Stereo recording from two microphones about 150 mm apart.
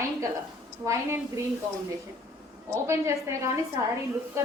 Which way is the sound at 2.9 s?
20° right (ahead or behind).